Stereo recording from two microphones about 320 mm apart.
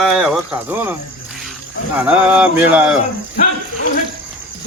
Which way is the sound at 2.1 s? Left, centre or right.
Centre.